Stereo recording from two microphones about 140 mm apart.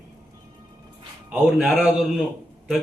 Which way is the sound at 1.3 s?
5° right (ahead or behind).